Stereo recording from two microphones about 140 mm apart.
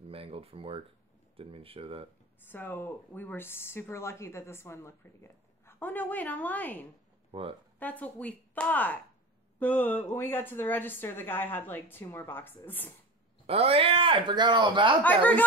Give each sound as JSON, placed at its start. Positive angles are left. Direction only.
{"t": 0.0, "sound": "speech", "side_deg": -45}
{"t": 2.4, "sound": "speech", "side_deg": 15}
{"t": 7.2, "sound": "speech", "side_deg": -40}
{"t": 7.8, "sound": "speech", "side_deg": 10}
{"t": 13.5, "sound": "speech", "side_deg": -45}
{"t": 15.0, "sound": "speech", "side_deg": 10}